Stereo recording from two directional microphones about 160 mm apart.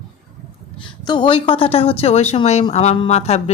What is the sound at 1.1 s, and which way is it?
A woman's voice, 30° left (ahead or behind).